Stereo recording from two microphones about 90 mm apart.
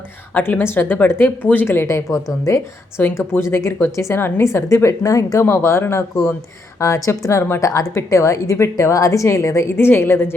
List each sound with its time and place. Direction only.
0.3 s a woman's voice: 20° left (ahead or behind)